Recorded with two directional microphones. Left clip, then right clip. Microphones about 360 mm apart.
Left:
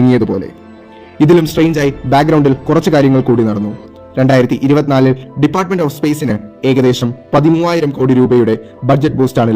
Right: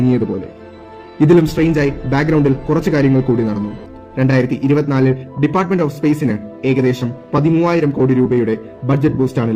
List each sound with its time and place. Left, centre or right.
1.2 s a man's voice: centre